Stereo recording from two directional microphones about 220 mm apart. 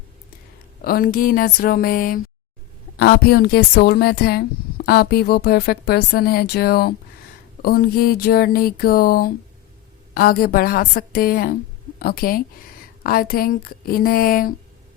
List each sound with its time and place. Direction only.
0.8 s speech: 40° left (ahead or behind)